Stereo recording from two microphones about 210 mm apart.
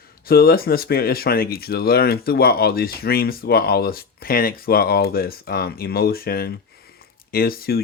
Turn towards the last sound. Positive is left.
turn(degrees=45)  # may be behind; listen again after turning